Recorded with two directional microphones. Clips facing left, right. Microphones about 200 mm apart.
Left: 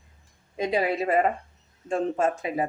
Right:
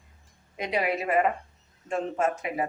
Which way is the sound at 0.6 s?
30° left (ahead or behind).